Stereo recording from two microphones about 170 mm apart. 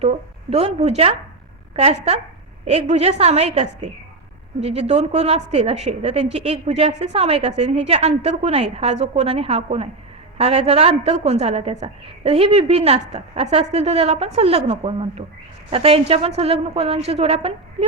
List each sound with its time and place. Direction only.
0.0 s a woman's voice: 40° right (ahead or behind)